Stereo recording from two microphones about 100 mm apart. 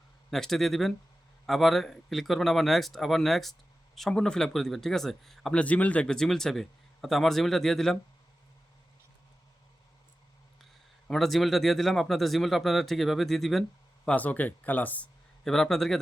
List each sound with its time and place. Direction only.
0.3 s speech: 5° left (ahead or behind)
11.1 s speech: centre (ahead or behind)
14.1 s speech: 15° left (ahead or behind)
15.4 s speech: 5° left (ahead or behind)